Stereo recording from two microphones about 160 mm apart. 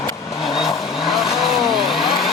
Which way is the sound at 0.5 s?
Centre (ahead or behind).